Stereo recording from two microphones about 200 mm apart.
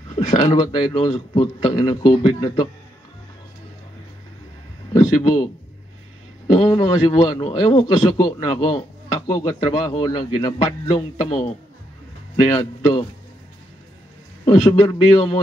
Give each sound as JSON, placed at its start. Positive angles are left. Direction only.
{"t": 0.1, "sound": "a man's voice", "side_deg": 25}
{"t": 4.9, "sound": "a man's voice", "side_deg": 20}
{"t": 12.4, "sound": "a man's voice", "side_deg": 20}
{"t": 14.4, "sound": "a man's voice", "side_deg": 20}